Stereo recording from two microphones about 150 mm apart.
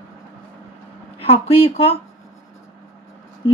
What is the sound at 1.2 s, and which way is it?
Speech, 40° left (ahead or behind).